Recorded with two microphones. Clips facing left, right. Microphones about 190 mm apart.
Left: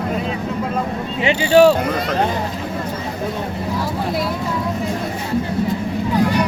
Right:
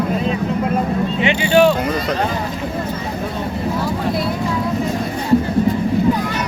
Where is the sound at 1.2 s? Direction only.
35° left (ahead or behind).